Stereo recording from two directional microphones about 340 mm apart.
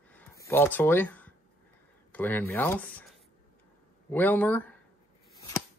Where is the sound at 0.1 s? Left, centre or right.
Centre.